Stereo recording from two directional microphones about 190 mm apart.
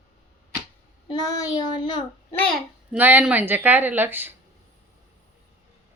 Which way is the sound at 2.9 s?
10° right (ahead or behind).